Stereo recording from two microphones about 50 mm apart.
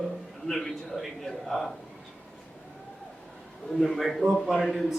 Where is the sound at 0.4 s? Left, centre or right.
Centre.